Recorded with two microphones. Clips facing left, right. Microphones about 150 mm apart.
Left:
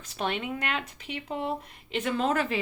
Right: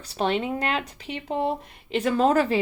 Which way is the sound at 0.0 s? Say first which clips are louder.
Right 6 dB; 35° right (ahead or behind).